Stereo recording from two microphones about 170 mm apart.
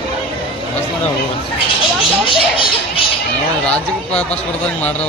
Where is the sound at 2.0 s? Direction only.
30° left (ahead or behind).